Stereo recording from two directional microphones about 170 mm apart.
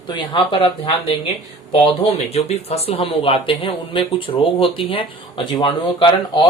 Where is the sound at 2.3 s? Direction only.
40° left (ahead or behind).